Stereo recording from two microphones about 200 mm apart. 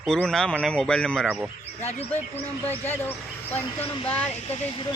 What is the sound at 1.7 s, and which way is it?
Speech, 35° left (ahead or behind).